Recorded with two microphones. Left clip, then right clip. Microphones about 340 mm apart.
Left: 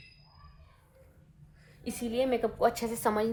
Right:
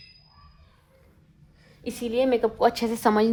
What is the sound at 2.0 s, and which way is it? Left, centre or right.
Speech, right.